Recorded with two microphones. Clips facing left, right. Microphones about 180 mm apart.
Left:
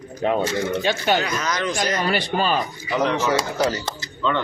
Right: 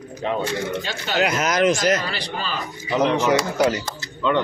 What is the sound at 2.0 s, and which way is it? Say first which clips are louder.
Speech: left 7 dB; 50° left (ahead or behind).